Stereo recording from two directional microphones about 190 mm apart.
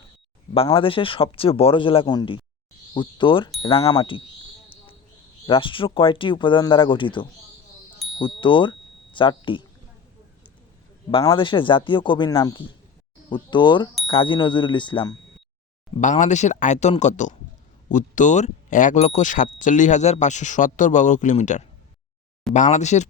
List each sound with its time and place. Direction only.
0.5 s a man's voice: 30° left (ahead or behind)
5.5 s a man's voice: 25° left (ahead or behind)
11.1 s a man's voice: 25° left (ahead or behind)
16.0 s speech: 40° left (ahead or behind)